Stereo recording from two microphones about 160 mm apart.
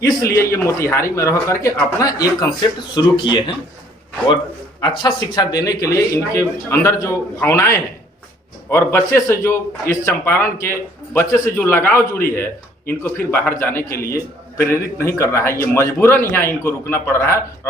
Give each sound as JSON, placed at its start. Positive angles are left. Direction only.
{"t": 0.0, "sound": "a man's voice", "side_deg": 20}
{"t": 4.8, "sound": "a man's voice", "side_deg": 25}